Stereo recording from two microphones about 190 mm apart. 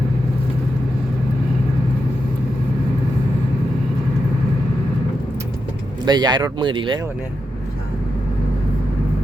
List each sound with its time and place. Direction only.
6.1 s speech: 20° right (ahead or behind)